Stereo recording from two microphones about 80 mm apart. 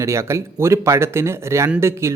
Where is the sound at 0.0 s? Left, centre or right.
Right.